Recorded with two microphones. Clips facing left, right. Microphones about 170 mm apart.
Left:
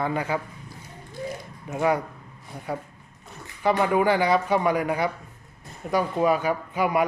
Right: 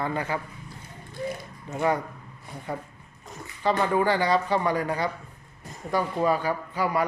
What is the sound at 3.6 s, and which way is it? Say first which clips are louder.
A man's voice: left 2 dB; 15° left (ahead or behind).